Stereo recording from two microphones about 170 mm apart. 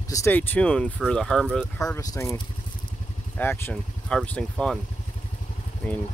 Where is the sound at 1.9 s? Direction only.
15° left (ahead or behind).